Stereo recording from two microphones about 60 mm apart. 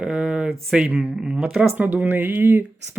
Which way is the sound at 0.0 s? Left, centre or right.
Centre.